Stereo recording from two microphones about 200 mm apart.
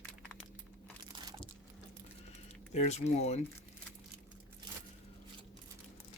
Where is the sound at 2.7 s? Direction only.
35° left (ahead or behind).